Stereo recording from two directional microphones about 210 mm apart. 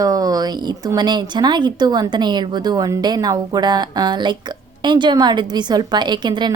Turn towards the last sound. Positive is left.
turn(degrees=-20)  # may be behind; listen again after turning